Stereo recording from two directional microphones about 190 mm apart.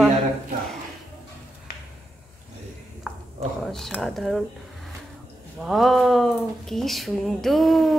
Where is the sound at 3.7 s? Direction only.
Centre (ahead or behind).